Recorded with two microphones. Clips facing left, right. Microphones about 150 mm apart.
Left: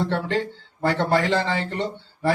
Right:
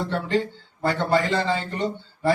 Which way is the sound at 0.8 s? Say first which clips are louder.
Left 1 dB; 80° left.